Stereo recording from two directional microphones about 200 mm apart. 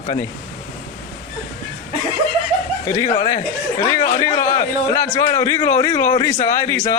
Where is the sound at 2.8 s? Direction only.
15° left (ahead or behind).